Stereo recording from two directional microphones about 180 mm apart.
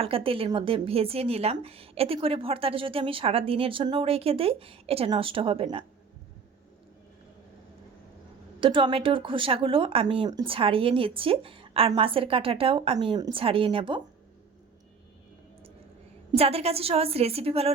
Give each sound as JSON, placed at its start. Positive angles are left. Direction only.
{"t": 0.0, "sound": "speech", "side_deg": -30}
{"t": 8.6, "sound": "speech", "side_deg": -30}
{"t": 16.3, "sound": "speech", "side_deg": -35}